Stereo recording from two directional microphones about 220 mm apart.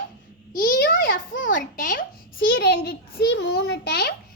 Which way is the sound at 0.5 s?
40° left (ahead or behind).